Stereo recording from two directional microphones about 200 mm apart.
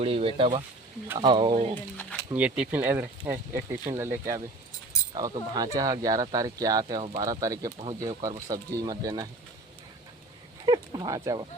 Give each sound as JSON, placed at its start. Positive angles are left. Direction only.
{"t": 0.0, "sound": "speech", "side_deg": -30}
{"t": 2.3, "sound": "speech", "side_deg": -5}
{"t": 10.7, "sound": "speech", "side_deg": -20}